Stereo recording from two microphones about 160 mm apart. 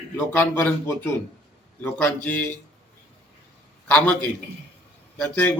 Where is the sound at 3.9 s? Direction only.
10° left (ahead or behind).